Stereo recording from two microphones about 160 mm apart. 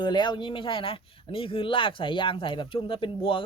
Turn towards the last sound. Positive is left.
turn(degrees=35)  # may be behind; listen again after turning